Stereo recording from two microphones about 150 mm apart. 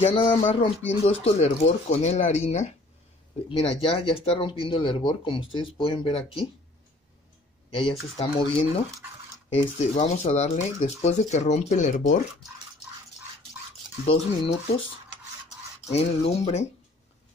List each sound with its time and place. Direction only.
0.0 s speech: 35° left (ahead or behind)
7.7 s speech: 35° left (ahead or behind); by 12.2 s 55° left (ahead or behind)
14.0 s speech: 40° left (ahead or behind)
15.9 s speech: 45° left (ahead or behind)